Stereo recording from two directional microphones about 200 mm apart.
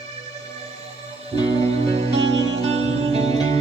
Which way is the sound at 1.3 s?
30° right (ahead or behind).